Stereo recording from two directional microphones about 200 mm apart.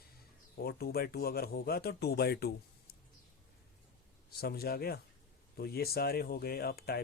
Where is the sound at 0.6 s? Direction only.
50° left (ahead or behind).